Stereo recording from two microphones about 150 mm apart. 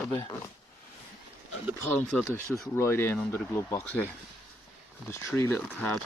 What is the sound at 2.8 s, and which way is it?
Speech, 15° left (ahead or behind).